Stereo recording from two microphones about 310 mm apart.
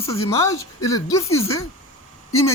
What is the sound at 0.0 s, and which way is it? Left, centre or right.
Speech, centre.